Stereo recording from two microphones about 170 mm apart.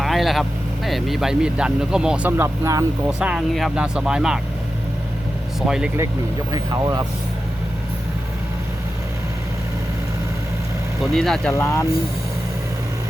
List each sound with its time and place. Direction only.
0.0 s vehicle: centre (ahead or behind)
0.9 s speech: centre (ahead or behind); by 2.8 s 15° right (ahead or behind)
3.1 s speech: 5° right (ahead or behind)
5.6 s speech: 5° right (ahead or behind)
6.5 s speech: 20° right (ahead or behind)
11.1 s speech: centre (ahead or behind)
11.5 s speech: 15° left (ahead or behind)